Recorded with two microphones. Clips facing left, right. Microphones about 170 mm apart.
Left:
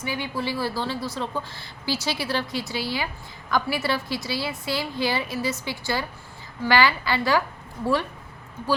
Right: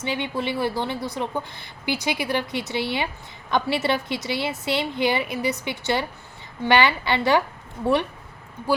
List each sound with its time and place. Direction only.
0.0 s a woman's voice: 25° right (ahead or behind)